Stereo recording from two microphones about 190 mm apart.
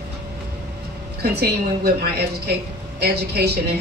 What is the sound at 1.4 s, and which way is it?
Speech, 55° right (ahead or behind).